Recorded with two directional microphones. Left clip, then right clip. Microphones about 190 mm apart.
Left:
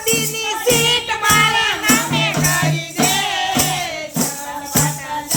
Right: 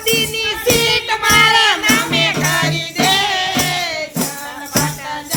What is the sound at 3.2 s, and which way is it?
Music, 45° right (ahead or behind).